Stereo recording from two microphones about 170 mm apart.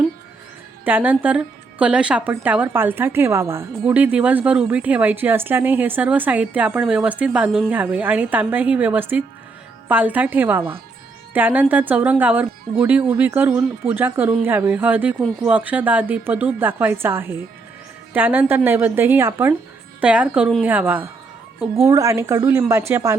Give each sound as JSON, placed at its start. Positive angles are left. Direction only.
{"t": 0.9, "sound": "speech", "side_deg": -10}